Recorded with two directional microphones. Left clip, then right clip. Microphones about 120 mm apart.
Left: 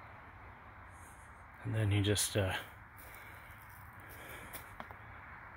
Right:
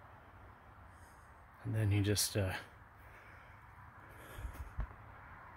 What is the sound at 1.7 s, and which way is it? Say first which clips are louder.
Speech: left 2 dB; 20° right (ahead or behind).